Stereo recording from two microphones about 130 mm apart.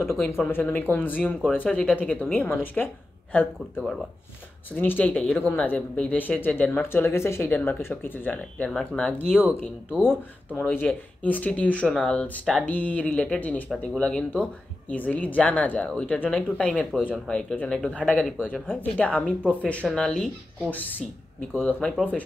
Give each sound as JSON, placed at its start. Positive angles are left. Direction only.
{"t": 0.0, "sound": "speech", "side_deg": 20}
{"t": 5.1, "sound": "speech", "side_deg": -5}
{"t": 5.4, "sound": "speech", "side_deg": 15}
{"t": 9.3, "sound": "speech", "side_deg": -5}
{"t": 10.0, "sound": "speech", "side_deg": 15}
{"t": 21.8, "sound": "speech", "side_deg": 10}